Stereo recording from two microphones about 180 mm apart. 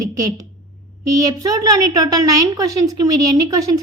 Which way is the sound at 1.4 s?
20° right (ahead or behind).